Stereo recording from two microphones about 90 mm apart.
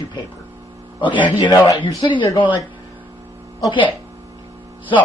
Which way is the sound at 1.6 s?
40° left (ahead or behind).